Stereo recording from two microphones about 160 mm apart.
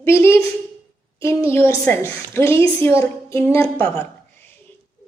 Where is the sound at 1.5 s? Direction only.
15° left (ahead or behind).